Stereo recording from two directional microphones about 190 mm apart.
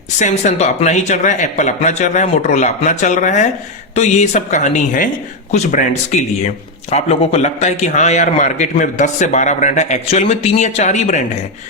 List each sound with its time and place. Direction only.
0.2 s a man's voice: 35° left (ahead or behind)